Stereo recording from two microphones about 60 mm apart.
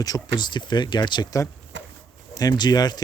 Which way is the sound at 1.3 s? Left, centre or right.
Left.